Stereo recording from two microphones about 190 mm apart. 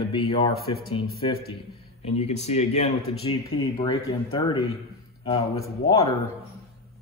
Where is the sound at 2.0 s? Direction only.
30° left (ahead or behind).